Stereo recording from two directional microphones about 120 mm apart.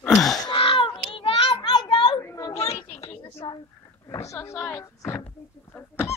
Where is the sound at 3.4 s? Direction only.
45° left (ahead or behind).